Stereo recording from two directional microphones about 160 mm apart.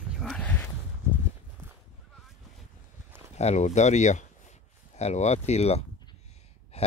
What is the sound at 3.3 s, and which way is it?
Speech, 45° left (ahead or behind).